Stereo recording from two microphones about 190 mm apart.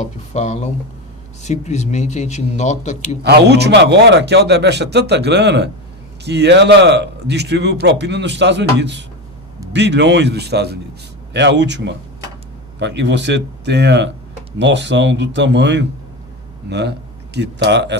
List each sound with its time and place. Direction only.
0.3 s speech: 35° left (ahead or behind)
3.2 s a man's voice: 60° right (ahead or behind)